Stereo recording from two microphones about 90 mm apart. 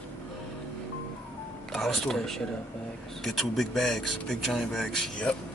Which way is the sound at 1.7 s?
5° left (ahead or behind).